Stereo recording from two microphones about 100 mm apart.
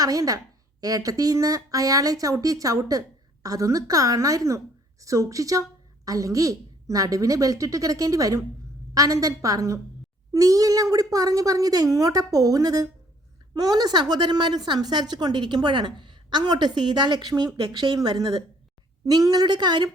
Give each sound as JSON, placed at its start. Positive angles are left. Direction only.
{"t": 0.0, "sound": "a woman's voice", "side_deg": -35}